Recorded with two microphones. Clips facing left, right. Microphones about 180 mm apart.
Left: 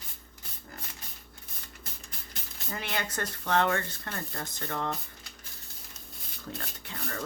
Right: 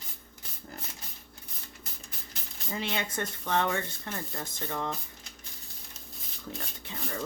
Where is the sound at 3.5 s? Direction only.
10° right (ahead or behind).